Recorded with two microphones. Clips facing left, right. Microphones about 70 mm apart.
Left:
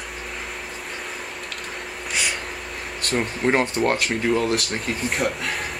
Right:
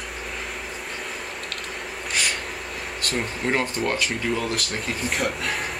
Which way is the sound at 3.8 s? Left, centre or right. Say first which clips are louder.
Left 4 dB; centre.